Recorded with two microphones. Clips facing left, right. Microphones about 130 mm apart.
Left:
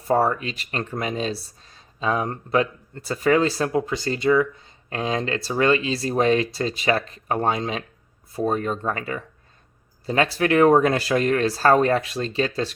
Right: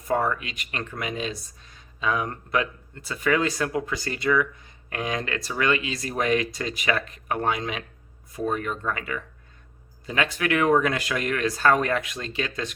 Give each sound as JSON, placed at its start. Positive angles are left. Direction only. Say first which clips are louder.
{"t": 0.1, "sound": "speech", "louder": "left 4 dB", "side_deg": 35}